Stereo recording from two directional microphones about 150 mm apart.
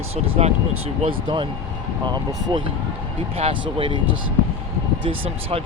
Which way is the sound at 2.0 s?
25° right (ahead or behind).